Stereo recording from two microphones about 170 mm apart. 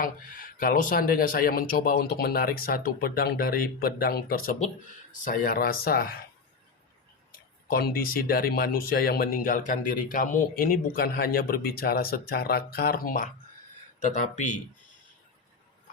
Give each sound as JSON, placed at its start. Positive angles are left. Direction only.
{"t": 0.0, "sound": "speech", "side_deg": 55}
{"t": 7.3, "sound": "speech", "side_deg": 60}